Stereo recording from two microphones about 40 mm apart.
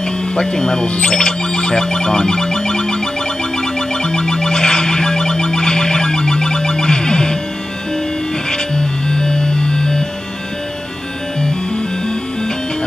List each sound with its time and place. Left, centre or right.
0.4 s speech: centre
1.0 s music: centre
8.5 s music: centre